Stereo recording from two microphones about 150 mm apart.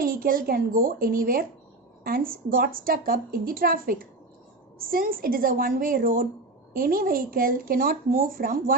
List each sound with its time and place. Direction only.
0.0 s a woman's voice: 70° right (ahead or behind)